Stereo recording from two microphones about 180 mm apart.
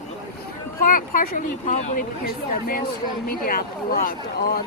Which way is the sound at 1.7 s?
40° left (ahead or behind).